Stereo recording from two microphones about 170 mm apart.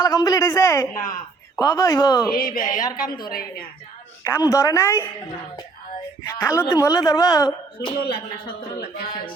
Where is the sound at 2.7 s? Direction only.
20° left (ahead or behind).